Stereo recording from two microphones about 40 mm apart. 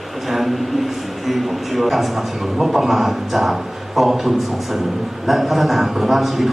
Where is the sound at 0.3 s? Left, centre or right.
Centre.